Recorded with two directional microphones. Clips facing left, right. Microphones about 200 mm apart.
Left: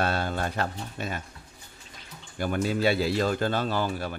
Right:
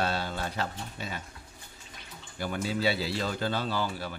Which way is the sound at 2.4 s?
50° left (ahead or behind).